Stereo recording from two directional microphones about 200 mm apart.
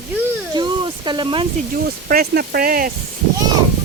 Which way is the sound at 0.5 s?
20° right (ahead or behind).